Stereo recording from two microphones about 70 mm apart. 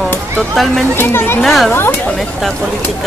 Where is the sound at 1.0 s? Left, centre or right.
Left.